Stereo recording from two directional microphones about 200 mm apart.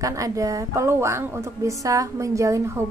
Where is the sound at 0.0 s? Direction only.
15° right (ahead or behind).